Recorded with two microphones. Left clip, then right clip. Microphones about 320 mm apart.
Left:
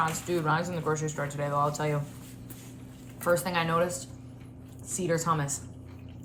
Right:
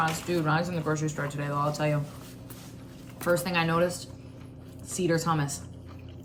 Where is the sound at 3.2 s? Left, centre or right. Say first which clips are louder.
Even; centre.